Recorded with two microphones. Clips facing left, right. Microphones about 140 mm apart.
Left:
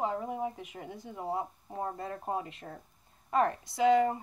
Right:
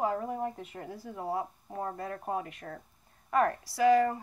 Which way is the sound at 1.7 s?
10° left (ahead or behind).